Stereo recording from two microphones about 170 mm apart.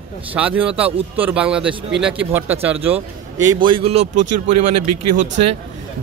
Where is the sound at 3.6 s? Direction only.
35° right (ahead or behind).